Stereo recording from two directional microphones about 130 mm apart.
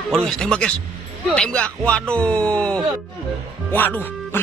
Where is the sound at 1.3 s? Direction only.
5° left (ahead or behind).